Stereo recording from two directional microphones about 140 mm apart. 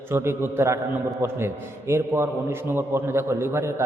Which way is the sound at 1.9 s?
15° right (ahead or behind).